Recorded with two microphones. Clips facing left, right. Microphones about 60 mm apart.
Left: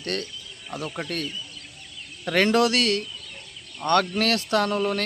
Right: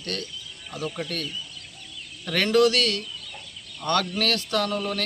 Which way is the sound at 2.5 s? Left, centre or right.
Left.